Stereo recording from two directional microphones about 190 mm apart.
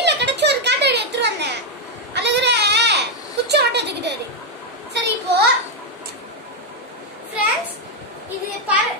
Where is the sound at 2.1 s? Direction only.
65° right (ahead or behind).